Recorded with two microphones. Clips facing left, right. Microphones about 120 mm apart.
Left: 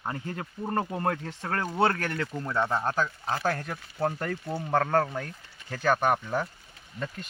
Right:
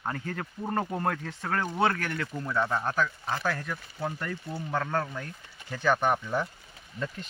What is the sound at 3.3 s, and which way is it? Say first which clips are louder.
Speech: left 2 dB; 40° left (ahead or behind).